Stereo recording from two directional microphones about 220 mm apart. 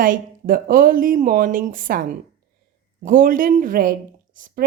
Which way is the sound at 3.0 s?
40° right (ahead or behind).